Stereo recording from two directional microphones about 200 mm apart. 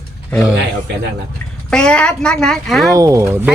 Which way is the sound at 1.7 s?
5° left (ahead or behind).